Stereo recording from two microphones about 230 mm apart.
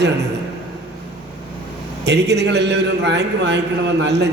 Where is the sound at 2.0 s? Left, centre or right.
Right.